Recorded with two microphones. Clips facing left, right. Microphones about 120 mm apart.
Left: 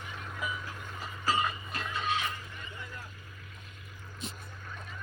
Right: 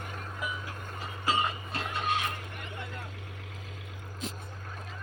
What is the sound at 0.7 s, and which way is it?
Vehicle, 45° right (ahead or behind).